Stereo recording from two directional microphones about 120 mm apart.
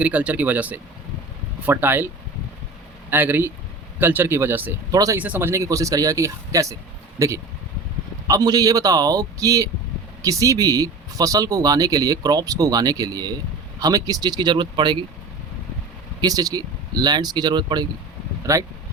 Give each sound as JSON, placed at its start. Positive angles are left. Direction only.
{"t": 0.0, "sound": "speech", "side_deg": -10}
{"t": 3.1, "sound": "speech", "side_deg": -20}
{"t": 4.9, "sound": "speech", "side_deg": -30}
{"t": 5.1, "sound": "speech", "side_deg": -15}
{"t": 16.2, "sound": "speech", "side_deg": -30}
{"t": 18.5, "sound": "speech", "side_deg": -25}